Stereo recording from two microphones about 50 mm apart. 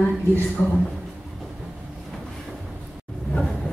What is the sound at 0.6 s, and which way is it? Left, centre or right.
Speech, left.